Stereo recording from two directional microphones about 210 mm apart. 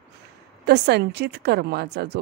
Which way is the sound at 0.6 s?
50° right (ahead or behind).